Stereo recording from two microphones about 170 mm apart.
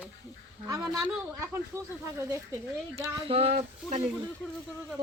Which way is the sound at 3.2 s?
35° right (ahead or behind).